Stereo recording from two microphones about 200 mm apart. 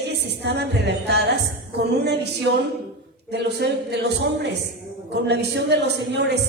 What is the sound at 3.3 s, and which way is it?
Speech, 55° right (ahead or behind).